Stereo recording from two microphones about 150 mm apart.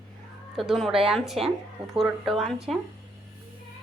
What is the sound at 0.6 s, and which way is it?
A woman's voice, centre (ahead or behind).